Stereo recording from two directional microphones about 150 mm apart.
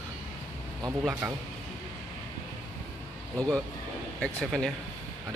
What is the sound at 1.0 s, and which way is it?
Speech, centre (ahead or behind).